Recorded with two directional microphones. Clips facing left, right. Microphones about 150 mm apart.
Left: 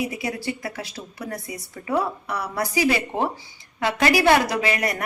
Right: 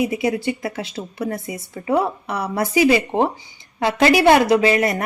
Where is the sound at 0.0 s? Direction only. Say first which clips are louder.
Right 7 dB; 20° right (ahead or behind).